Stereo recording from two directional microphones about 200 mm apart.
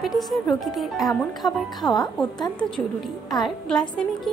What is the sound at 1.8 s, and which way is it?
Speech, 20° left (ahead or behind).